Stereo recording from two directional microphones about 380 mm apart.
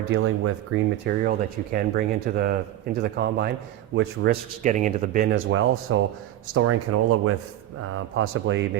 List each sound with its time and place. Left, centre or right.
0.1 s speech: right